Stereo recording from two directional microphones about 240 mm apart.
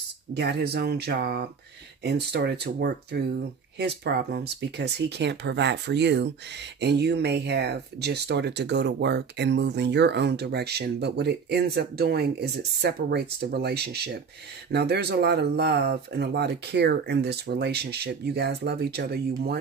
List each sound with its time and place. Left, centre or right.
0.3 s speech: right